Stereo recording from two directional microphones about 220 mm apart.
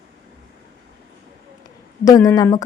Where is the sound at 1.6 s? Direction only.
15° left (ahead or behind).